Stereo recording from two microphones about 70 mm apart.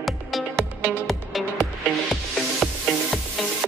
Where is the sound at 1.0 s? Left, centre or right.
Centre.